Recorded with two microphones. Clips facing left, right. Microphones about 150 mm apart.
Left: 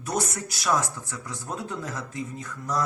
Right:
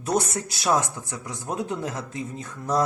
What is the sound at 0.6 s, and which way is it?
Speech, 20° right (ahead or behind).